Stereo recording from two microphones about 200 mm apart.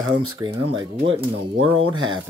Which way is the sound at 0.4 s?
25° right (ahead or behind).